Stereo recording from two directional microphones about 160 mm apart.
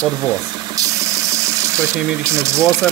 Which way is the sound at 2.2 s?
15° right (ahead or behind).